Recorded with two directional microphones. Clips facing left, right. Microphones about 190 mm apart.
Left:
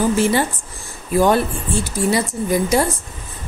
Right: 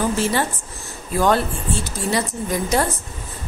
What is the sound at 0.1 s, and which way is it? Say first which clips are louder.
A woman's voice: left 4 dB; 15° left (ahead or behind).